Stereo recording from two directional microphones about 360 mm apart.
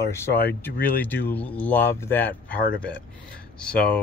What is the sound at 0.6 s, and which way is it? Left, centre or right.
Speech, centre.